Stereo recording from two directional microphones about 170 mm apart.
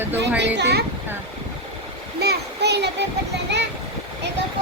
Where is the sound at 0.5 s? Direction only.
85° right.